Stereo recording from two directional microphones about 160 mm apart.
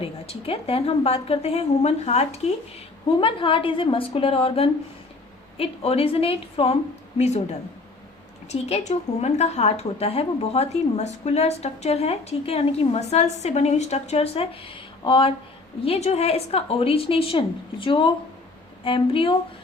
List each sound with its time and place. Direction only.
0.0 s a woman's voice: 35° left (ahead or behind)
8.4 s a woman's voice: 40° left (ahead or behind)